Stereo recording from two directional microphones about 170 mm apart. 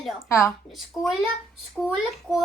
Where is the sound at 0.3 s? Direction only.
15° left (ahead or behind).